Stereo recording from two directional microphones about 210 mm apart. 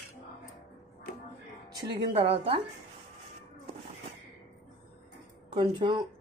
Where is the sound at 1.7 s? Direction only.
20° right (ahead or behind).